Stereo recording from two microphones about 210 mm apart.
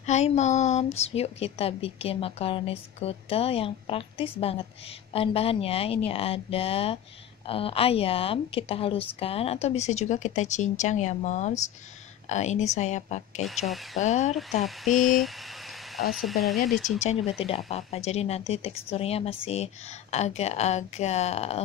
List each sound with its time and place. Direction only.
0.0 s a woman's voice: 35° left (ahead or behind)
14.9 s speech: centre (ahead or behind)
17.6 s speech: 30° left (ahead or behind)